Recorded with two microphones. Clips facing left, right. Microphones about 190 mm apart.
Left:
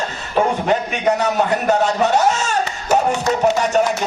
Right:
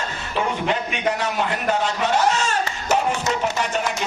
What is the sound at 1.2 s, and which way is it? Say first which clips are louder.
Speech: left 6 dB; 40° left (ahead or behind).